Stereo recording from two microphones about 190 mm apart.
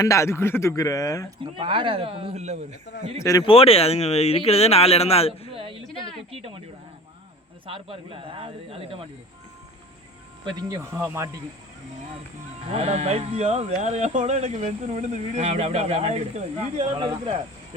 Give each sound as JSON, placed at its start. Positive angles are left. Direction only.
{"t": 0.0, "sound": "speech", "side_deg": 15}
{"t": 1.5, "sound": "speech", "side_deg": -25}
{"t": 3.2, "sound": "speech", "side_deg": 20}
{"t": 3.5, "sound": "speech", "side_deg": 30}
{"t": 5.5, "sound": "speech", "side_deg": -30}
{"t": 7.7, "sound": "speech", "side_deg": -30}
{"t": 10.5, "sound": "speech", "side_deg": -20}
{"t": 12.6, "sound": "speech", "side_deg": -35}